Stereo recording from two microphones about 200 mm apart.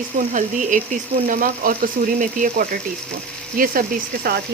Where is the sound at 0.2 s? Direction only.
40° right (ahead or behind).